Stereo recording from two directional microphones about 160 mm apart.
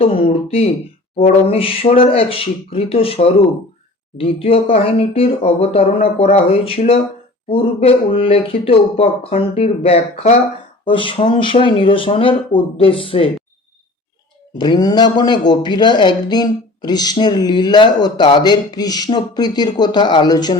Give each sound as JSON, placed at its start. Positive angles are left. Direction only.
{"t": 0.0, "sound": "speech", "side_deg": 40}
{"t": 14.6, "sound": "speech", "side_deg": 25}